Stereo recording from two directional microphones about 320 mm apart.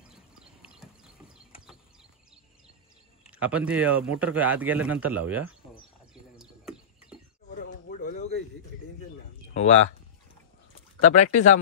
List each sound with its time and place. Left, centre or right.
0.1 s clip-clop: centre
3.3 s speech: centre
6.3 s bird: centre
7.5 s a sound: left
9.5 s a sound: left
11.1 s speech: left